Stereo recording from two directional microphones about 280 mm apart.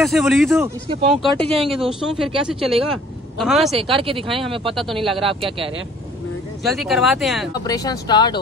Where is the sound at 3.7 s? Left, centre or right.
Centre.